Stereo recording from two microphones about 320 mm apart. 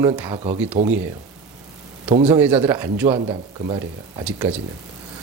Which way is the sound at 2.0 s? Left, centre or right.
Centre.